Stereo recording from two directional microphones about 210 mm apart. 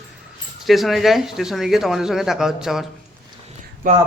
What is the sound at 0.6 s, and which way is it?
Speech, centre (ahead or behind).